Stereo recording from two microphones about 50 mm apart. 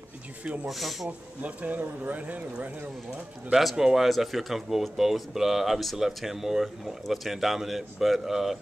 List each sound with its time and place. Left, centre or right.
0.4 s speech: right
0.7 s speech: centre
1.4 s speech: right
3.5 s speech: centre